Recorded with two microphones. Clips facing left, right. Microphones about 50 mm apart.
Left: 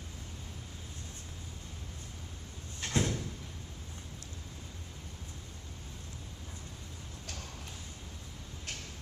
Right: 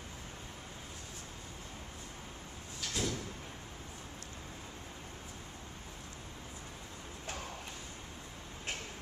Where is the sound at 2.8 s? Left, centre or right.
Left.